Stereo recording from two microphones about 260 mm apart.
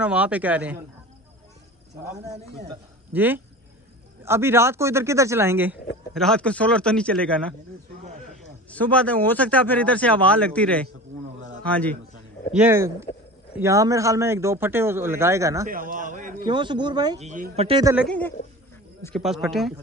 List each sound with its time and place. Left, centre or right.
0.0 s speech: centre
3.1 s speech: centre
8.4 s speech: centre
12.5 s speech: centre
15.7 s speech: right
16.4 s speech: centre
17.3 s speech: right
17.9 s speech: centre